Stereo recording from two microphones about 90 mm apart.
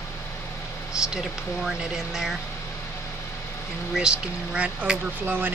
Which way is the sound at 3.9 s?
10° right (ahead or behind).